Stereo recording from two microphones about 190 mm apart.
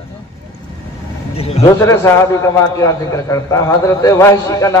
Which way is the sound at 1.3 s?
30° left (ahead or behind).